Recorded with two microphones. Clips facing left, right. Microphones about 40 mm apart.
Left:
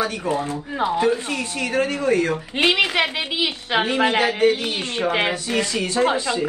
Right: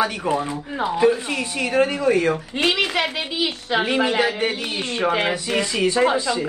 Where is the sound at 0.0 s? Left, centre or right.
Right.